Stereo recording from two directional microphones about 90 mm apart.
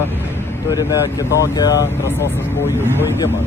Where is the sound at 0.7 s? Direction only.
45° left (ahead or behind).